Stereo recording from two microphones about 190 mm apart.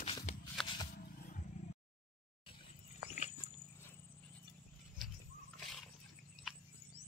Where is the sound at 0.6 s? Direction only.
Centre (ahead or behind).